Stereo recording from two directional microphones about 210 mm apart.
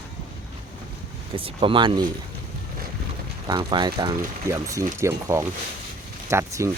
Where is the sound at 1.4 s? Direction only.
25° right (ahead or behind).